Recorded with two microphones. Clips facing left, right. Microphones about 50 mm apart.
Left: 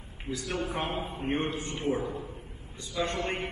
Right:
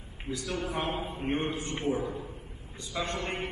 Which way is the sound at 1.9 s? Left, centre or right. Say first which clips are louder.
Left 1 dB; left.